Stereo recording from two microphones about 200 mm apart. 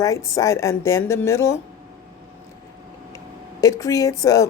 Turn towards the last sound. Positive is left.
turn(degrees=15)  # may be behind; listen again after turning